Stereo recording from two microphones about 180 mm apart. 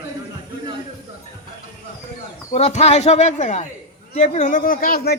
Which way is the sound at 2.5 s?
35° left (ahead or behind).